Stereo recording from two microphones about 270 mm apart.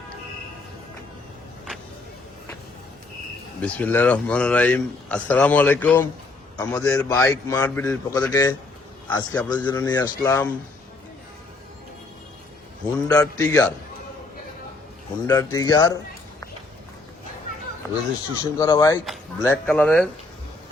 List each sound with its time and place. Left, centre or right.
3.6 s a man's voice: centre
12.8 s a man's voice: centre
15.3 s a man's voice: centre
18.5 s a man's voice: centre